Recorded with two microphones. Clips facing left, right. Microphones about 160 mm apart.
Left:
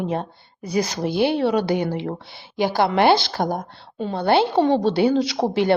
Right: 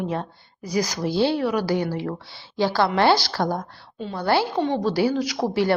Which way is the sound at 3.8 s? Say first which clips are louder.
Left 5 dB; 55° left (ahead or behind).